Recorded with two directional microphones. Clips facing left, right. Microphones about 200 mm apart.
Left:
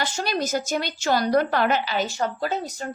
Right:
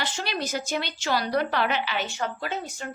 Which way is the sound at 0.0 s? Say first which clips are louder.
Left 4 dB; 40° left (ahead or behind).